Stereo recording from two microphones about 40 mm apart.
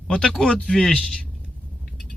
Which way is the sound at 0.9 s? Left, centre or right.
Left.